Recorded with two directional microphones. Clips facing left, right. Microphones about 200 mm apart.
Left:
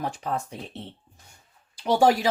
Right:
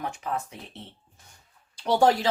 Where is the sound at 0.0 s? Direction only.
35° left (ahead or behind).